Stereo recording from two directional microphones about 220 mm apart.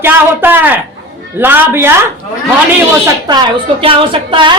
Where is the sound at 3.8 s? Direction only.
25° right (ahead or behind).